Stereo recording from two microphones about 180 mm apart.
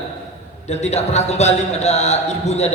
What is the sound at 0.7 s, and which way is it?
A man's voice, 35° left (ahead or behind).